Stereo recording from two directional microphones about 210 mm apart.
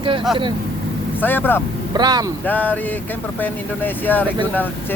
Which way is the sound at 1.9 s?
20° right (ahead or behind).